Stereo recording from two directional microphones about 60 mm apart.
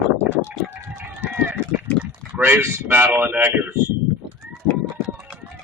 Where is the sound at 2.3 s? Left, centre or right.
Right.